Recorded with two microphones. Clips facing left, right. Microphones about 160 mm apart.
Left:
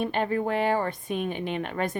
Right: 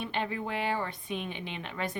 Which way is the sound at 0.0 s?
45° left (ahead or behind).